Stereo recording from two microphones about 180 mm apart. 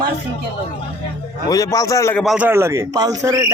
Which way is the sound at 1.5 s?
20° left (ahead or behind).